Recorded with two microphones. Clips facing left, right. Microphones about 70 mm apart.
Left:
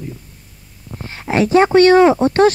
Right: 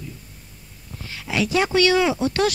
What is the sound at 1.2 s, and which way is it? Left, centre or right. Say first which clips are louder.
Speech: left 9 dB; left.